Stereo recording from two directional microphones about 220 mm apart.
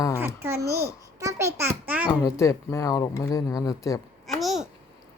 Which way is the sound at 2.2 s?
15° left (ahead or behind).